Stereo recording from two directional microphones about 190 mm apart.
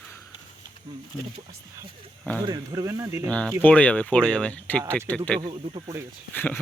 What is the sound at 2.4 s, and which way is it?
Speech, 20° right (ahead or behind).